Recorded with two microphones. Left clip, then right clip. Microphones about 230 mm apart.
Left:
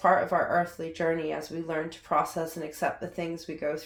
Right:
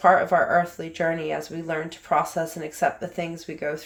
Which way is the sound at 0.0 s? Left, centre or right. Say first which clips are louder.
Right 6 dB; right.